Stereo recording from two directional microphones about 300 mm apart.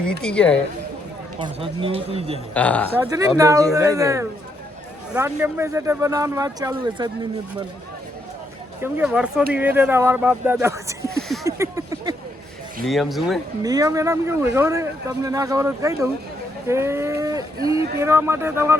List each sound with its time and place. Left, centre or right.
0.2 s speech: centre
1.4 s speech: centre
2.5 s speech: centre
2.9 s speech: centre
8.8 s speech: centre
11.4 s a sound: centre
12.8 s speech: centre
13.6 s speech: centre